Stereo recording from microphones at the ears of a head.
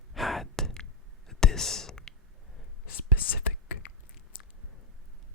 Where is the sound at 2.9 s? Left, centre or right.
Left.